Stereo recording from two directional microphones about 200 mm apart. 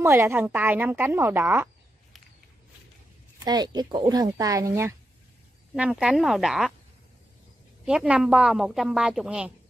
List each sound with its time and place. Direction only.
0.0 s a woman's voice: 10° right (ahead or behind)
3.4 s a woman's voice: 20° right (ahead or behind); by 6.7 s centre (ahead or behind)
7.8 s a woman's voice: 5° right (ahead or behind)